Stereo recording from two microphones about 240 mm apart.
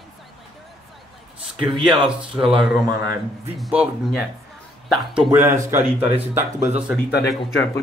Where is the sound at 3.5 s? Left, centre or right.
Centre.